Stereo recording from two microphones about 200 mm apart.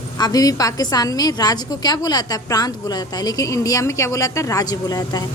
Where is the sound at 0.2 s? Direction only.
20° left (ahead or behind).